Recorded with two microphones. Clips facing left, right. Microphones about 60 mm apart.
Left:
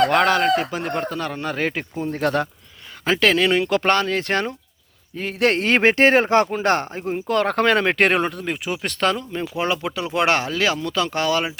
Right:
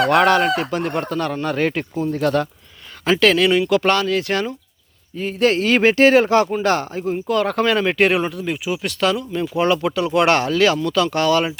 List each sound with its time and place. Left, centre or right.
0.0 s speech: centre
2.0 s speech: left
3.0 s speech: left
5.1 s speech: left
7.3 s speech: left
9.6 s speech: centre